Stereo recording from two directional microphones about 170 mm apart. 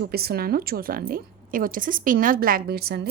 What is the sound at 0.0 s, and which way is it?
A woman's voice, 65° right (ahead or behind).